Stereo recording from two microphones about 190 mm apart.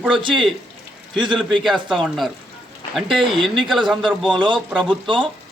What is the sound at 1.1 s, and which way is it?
Speech, 25° right (ahead or behind).